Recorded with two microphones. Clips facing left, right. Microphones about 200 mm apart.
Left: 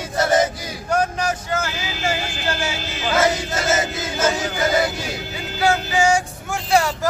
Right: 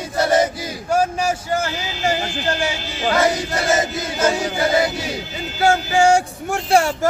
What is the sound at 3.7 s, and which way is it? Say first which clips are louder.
Chant: right 2 dB; 10° right (ahead or behind).